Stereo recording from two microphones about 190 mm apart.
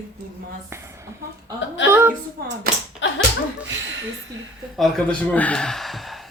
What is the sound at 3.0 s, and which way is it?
Dog, 75° left (ahead or behind).